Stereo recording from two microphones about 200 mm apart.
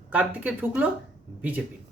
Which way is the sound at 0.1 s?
5° right (ahead or behind).